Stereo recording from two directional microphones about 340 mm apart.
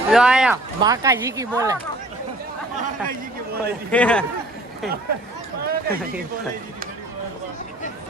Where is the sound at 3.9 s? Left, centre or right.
Centre.